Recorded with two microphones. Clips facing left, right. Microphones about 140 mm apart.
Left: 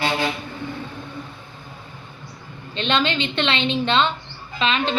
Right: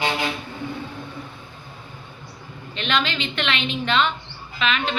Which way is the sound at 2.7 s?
30° left (ahead or behind).